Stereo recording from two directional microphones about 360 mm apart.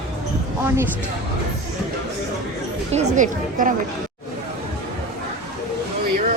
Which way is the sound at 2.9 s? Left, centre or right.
Right.